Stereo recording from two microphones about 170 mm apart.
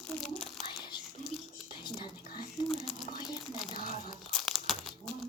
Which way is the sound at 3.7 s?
55° left (ahead or behind).